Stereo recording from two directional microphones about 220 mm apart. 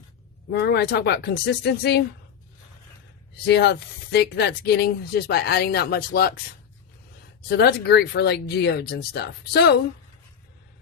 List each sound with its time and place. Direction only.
0.5 s speech: 50° left (ahead or behind)
3.3 s speech: 50° left (ahead or behind)
7.4 s speech: 50° left (ahead or behind)